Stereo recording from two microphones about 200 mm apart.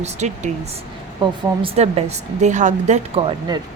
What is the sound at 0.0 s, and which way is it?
A woman's voice, 35° right (ahead or behind).